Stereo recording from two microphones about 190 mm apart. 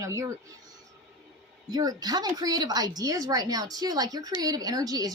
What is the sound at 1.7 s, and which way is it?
A woman's voice, 20° right (ahead or behind).